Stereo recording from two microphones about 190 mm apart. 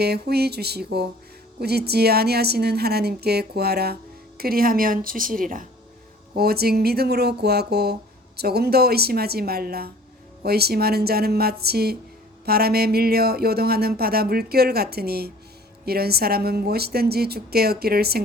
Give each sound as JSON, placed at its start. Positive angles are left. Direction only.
{"t": 0.0, "sound": "speech", "side_deg": -55}